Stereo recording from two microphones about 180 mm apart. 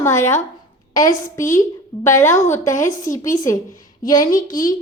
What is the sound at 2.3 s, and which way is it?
Speech, 40° left (ahead or behind).